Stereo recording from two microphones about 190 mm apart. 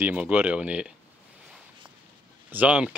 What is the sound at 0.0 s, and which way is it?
Speech, 10° right (ahead or behind).